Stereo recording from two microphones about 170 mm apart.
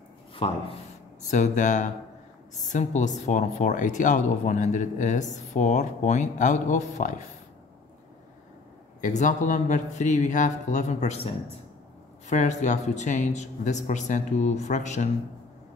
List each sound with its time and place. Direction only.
0.3 s speech: 30° left (ahead or behind)
1.3 s speech: 45° left (ahead or behind)
9.0 s speech: 45° left (ahead or behind)